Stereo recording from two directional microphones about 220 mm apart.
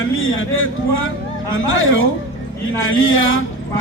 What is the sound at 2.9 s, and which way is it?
Speech, 65° left (ahead or behind).